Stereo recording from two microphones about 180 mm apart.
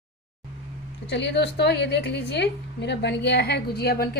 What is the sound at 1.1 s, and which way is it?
A woman's voice, 75° left (ahead or behind).